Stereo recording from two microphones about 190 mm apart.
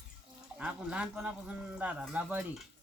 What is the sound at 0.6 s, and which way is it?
Speech, 5° right (ahead or behind).